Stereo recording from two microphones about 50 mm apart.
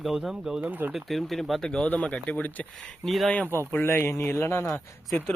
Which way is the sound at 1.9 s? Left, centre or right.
Left.